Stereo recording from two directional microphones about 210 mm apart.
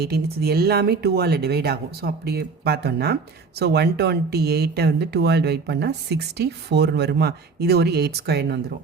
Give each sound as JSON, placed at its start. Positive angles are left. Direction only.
{"t": 0.0, "sound": "speech", "side_deg": -50}